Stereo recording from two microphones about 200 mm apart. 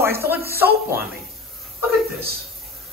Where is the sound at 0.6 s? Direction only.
10° right (ahead or behind).